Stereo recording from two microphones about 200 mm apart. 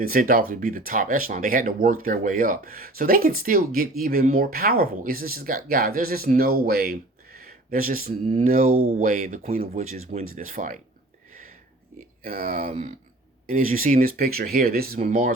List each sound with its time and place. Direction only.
0.0 s speech: 45° right (ahead or behind)
8.6 s speech: 90° right
9.0 s speech: 40° right (ahead or behind)
12.2 s speech: 45° right (ahead or behind)